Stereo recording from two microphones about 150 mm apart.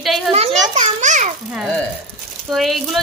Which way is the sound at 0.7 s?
55° right (ahead or behind).